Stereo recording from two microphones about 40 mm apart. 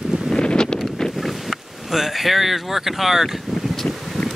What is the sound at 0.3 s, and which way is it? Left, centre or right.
Wind noise, left.